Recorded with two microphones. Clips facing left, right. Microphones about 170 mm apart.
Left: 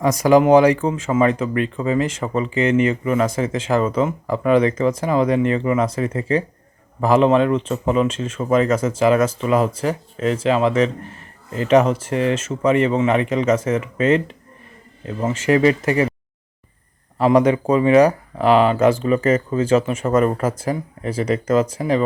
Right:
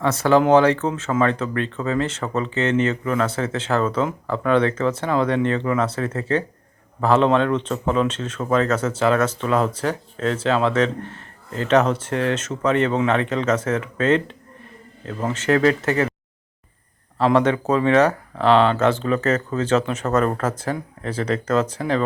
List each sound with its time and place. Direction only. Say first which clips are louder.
0.0 s speech: left 3 dB; 15° left (ahead or behind)
17.2 s speech: left 3 dB; 10° left (ahead or behind)